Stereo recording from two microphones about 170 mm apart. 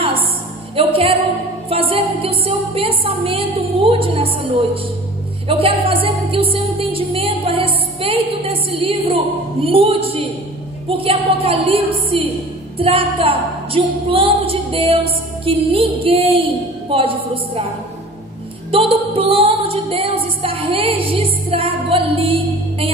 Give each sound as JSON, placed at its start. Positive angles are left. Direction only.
{"t": 0.7, "sound": "music", "side_deg": -35}
{"t": 5.5, "sound": "a woman's voice", "side_deg": -35}
{"t": 12.7, "sound": "a sound", "side_deg": -30}
{"t": 15.4, "sound": "music", "side_deg": -35}
{"t": 18.7, "sound": "music", "side_deg": -35}